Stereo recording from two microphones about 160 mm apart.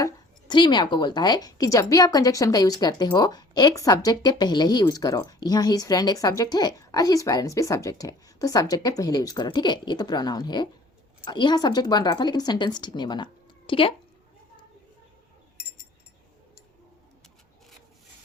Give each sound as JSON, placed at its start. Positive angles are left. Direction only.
{"t": 0.0, "sound": "a woman's voice", "side_deg": 25}